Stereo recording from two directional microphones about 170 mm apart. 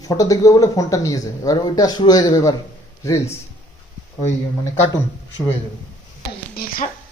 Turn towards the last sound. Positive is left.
turn(degrees=60)  # may be behind; listen again after turning